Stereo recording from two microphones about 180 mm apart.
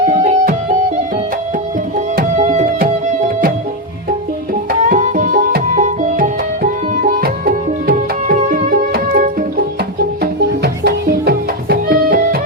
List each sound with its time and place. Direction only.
0.1 s music: 45° right (ahead or behind)
2.1 s music: 45° right (ahead or behind)
4.7 s music: 45° right (ahead or behind)